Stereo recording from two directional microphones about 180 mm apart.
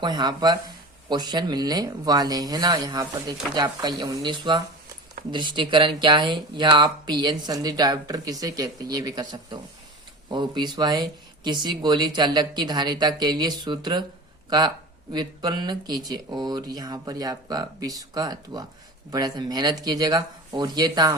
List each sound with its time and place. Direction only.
0.0 s speech: 25° right (ahead or behind)
15.1 s speech: 25° right (ahead or behind)